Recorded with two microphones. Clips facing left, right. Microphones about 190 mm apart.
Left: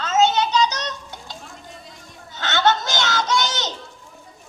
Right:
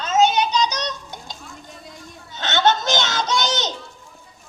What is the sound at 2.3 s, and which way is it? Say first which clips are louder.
Goat: right 1 dB; 20° right (ahead or behind).